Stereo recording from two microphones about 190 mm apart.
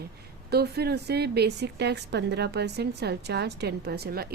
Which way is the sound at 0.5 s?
55° right (ahead or behind).